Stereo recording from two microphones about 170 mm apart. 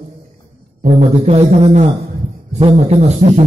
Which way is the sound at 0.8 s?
40° right (ahead or behind).